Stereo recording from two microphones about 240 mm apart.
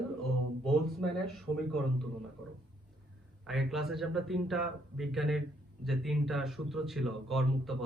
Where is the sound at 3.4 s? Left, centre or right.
Centre.